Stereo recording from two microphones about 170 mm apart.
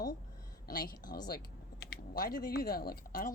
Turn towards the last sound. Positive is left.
turn(degrees=60)  # may be behind; listen again after turning